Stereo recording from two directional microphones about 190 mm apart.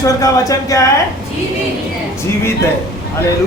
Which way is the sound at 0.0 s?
15° left (ahead or behind).